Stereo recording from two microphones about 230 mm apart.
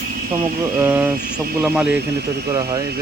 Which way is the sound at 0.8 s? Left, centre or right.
Centre.